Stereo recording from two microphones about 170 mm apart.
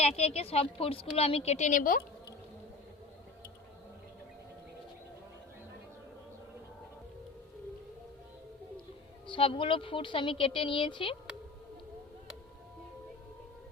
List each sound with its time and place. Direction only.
0.0 s speech: 40° left (ahead or behind)
9.2 s speech: 30° left (ahead or behind)